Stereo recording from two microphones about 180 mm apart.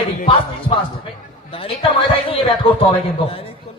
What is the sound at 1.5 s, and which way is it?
Speech, 30° left (ahead or behind).